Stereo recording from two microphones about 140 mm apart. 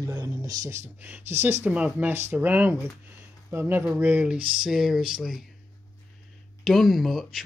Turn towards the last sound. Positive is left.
turn(degrees=0)  # may be behind; listen again after turning